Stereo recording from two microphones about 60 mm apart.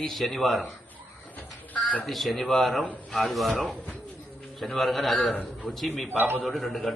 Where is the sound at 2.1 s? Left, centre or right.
Centre.